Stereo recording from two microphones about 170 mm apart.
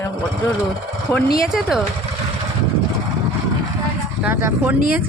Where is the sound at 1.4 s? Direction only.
Centre (ahead or behind).